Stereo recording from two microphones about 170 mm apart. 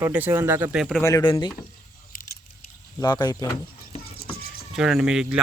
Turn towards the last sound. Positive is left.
turn(degrees=-5)  # may be behind; listen again after turning